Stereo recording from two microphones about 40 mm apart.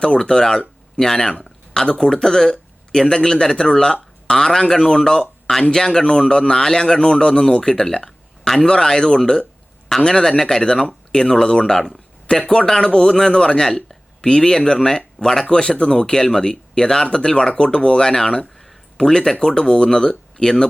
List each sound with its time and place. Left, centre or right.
0.0 s speech: centre